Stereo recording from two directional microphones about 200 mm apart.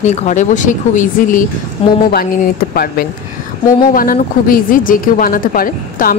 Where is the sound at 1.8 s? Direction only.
30° left (ahead or behind).